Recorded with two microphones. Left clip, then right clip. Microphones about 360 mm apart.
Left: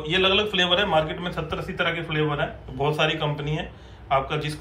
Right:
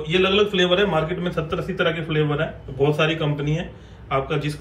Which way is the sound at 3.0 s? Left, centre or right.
Centre.